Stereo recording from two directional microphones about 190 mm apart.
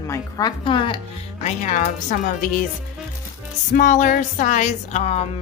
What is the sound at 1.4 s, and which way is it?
Speech, 40° left (ahead or behind).